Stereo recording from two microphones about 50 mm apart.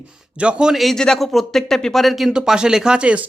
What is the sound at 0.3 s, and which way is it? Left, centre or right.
Speech, right.